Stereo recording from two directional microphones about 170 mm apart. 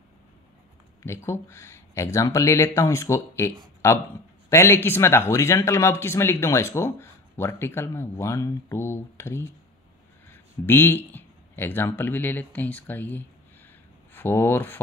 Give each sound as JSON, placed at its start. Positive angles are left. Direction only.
{"t": 1.0, "sound": "speech", "side_deg": 15}